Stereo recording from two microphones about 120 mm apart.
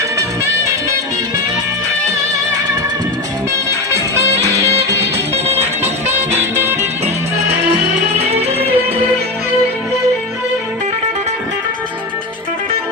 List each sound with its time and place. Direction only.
6.1 s music: 20° right (ahead or behind)
8.2 s music: 60° right (ahead or behind)